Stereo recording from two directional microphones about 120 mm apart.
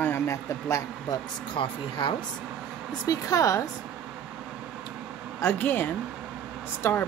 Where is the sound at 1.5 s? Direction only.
45° left (ahead or behind).